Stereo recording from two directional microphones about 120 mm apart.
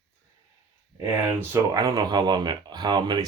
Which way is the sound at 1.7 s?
30° right (ahead or behind).